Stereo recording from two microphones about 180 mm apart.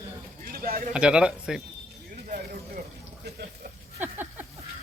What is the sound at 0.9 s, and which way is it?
Speech, 5° right (ahead or behind).